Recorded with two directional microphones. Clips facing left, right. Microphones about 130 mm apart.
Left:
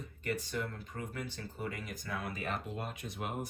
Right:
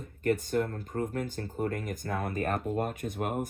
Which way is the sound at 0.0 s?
50° right (ahead or behind).